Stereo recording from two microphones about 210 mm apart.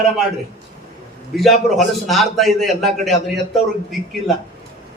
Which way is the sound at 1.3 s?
Centre (ahead or behind).